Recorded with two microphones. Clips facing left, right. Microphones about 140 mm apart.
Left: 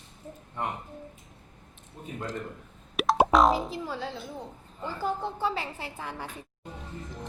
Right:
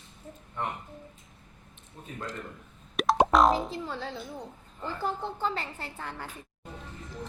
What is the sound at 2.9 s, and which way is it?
A woman's voice, centre (ahead or behind).